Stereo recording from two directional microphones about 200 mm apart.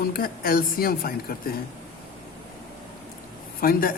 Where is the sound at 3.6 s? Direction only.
45° left (ahead or behind).